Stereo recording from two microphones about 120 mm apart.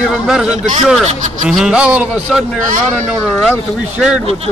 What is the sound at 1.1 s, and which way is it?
Speech, 90° right.